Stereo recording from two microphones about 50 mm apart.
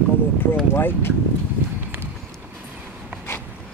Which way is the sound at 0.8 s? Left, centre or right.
Left.